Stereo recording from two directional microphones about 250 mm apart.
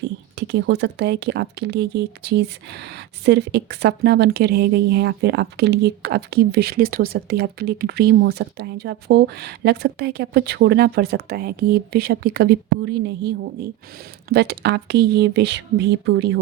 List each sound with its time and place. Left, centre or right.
0.0 s speech: right